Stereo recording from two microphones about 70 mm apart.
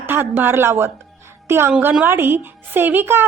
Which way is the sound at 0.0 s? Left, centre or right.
Right.